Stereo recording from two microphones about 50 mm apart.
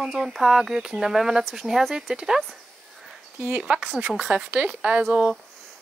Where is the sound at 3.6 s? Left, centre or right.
Centre.